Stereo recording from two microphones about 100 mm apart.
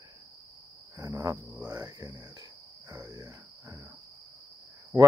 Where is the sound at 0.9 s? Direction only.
35° right (ahead or behind).